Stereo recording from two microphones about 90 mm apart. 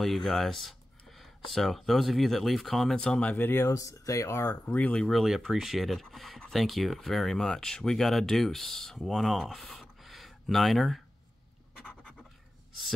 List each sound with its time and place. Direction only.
0.0 s speech: centre (ahead or behind)
3.3 s speech: 25° left (ahead or behind)
3.6 s speech: 40° left (ahead or behind)
4.5 s speech: 15° left (ahead or behind)
5.1 s speech: 5° right (ahead or behind)
11.8 s scratch: 15° left (ahead or behind)